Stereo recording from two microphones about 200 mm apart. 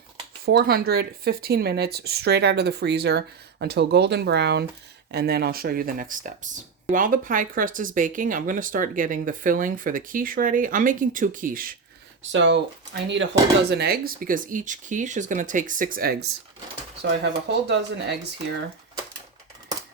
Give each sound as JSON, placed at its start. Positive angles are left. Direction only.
{"t": 0.4, "sound": "speech", "side_deg": -50}
{"t": 12.3, "sound": "speech", "side_deg": -60}
{"t": 17.0, "sound": "speech", "side_deg": -60}